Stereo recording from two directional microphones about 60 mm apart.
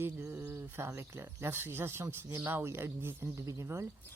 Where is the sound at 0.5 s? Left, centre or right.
Right.